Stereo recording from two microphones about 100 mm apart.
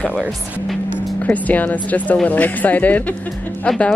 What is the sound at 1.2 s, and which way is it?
Speech, 15° left (ahead or behind).